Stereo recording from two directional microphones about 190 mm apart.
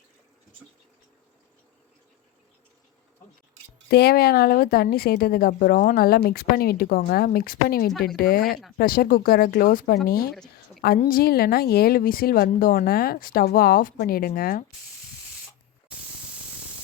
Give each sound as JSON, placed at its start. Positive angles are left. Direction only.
{"t": 3.8, "sound": "speech", "side_deg": 60}